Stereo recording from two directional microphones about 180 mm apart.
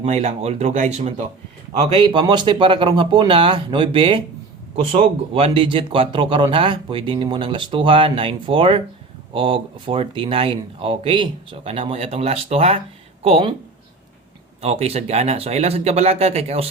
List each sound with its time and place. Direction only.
0.0 s speech: 40° right (ahead or behind)
2.0 s a man's voice: 25° right (ahead or behind)
14.6 s speech: 35° right (ahead or behind)